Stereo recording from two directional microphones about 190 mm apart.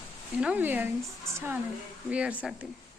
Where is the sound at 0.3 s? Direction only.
5° right (ahead or behind).